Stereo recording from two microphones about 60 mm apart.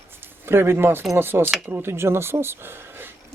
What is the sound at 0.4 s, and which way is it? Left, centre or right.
Speech, right.